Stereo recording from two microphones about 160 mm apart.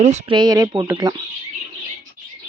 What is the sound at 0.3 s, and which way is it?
Speech, 25° right (ahead or behind).